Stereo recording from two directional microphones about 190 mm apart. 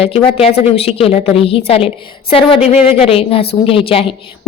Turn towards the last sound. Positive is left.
turn(degrees=30)  # may be behind; listen again after turning